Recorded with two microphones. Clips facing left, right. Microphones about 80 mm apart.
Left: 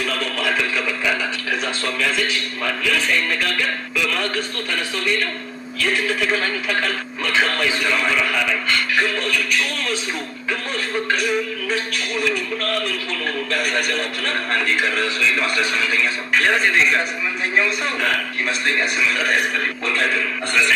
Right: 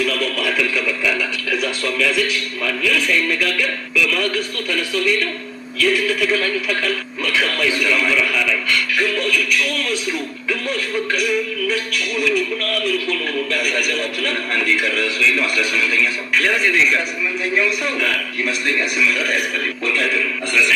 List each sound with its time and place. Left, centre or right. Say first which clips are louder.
0.0 s music: right 3 dB; left